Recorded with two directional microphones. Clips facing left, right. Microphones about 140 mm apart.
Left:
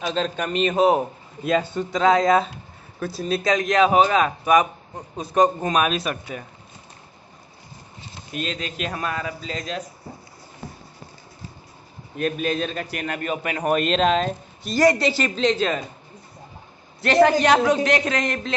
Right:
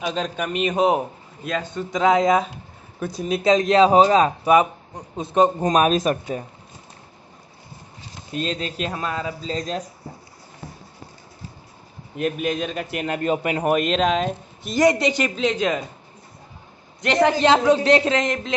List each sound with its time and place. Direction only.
0.0 s speech: 10° right (ahead or behind)
1.4 s a man's voice: 5° left (ahead or behind)
1.9 s speech: 15° right (ahead or behind)
5.6 s speech: 40° right (ahead or behind)
8.3 s speech: 35° right (ahead or behind)
8.9 s speech: 25° right (ahead or behind)
12.2 s speech: 15° right (ahead or behind)
13.6 s speech: 10° right (ahead or behind)
14.6 s speech: 20° right (ahead or behind)
17.0 s speech: 20° right (ahead or behind)